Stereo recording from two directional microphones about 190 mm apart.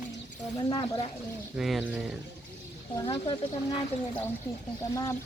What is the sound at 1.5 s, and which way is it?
Speech, centre (ahead or behind).